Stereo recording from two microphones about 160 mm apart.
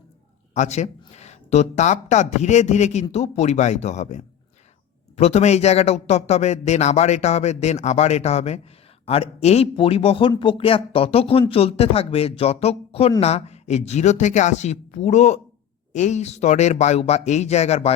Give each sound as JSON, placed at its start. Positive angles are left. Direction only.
{"t": 0.5, "sound": "speech", "side_deg": 45}